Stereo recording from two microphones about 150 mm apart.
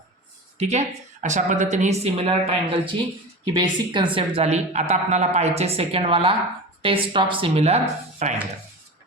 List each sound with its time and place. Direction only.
0.6 s a woman's voice: 50° right (ahead or behind)